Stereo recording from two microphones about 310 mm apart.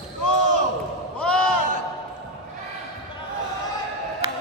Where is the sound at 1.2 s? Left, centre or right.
Centre.